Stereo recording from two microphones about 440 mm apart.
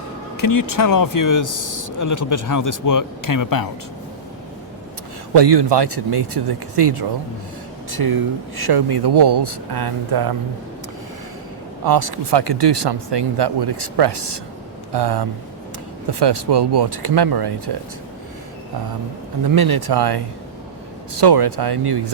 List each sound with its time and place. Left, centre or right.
0.4 s speech: left
5.3 s speech: right
7.9 s speech: right
11.9 s speech: right
19.5 s speech: right